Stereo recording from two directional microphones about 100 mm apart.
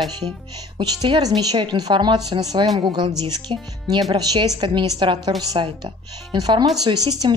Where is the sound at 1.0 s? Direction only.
45° right (ahead or behind).